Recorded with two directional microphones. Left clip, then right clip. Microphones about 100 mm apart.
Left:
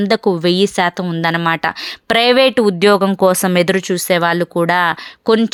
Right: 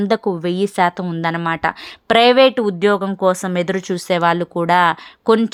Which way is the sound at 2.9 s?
35° left (ahead or behind).